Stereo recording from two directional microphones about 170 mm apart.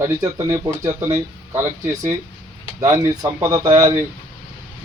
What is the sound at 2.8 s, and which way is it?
Speech, 25° right (ahead or behind).